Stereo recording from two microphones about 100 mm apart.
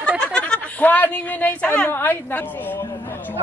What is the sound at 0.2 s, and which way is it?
Speech, 10° left (ahead or behind).